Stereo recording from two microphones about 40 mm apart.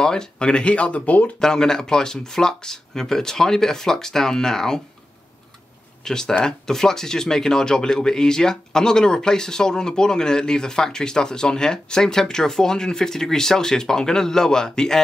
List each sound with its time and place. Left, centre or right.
0.0 s speech: centre
0.5 s speech: left
1.4 s speech: centre
6.0 s speech: centre